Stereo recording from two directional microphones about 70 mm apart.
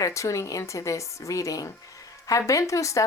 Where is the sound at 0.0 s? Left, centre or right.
Left.